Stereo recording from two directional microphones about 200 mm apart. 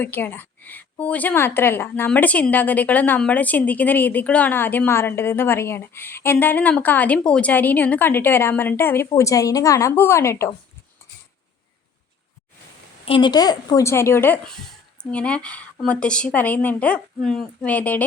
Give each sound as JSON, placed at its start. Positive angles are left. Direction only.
{"t": 0.0, "sound": "a woman's voice", "side_deg": 10}
{"t": 13.1, "sound": "a woman's voice", "side_deg": 25}